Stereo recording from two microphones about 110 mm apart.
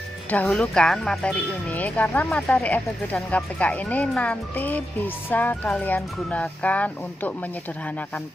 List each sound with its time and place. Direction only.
0.3 s speech: 10° left (ahead or behind)